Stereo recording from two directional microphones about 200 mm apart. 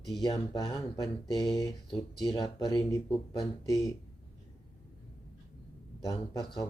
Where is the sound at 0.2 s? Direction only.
20° left (ahead or behind).